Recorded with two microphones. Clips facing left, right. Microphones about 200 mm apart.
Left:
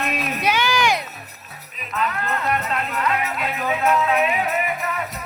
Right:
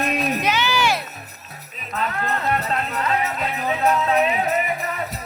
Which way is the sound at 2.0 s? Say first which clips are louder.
Even; 35° right (ahead or behind).